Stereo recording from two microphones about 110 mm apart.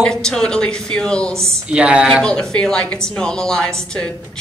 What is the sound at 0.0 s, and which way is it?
A woman's voice, 5° left (ahead or behind).